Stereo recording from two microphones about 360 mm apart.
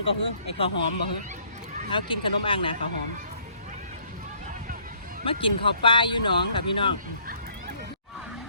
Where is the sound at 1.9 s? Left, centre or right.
Centre.